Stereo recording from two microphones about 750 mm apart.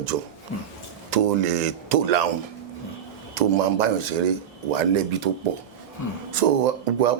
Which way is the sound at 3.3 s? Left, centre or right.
Right.